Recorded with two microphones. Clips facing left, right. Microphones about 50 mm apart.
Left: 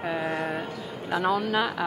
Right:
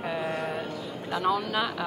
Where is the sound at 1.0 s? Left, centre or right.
Left.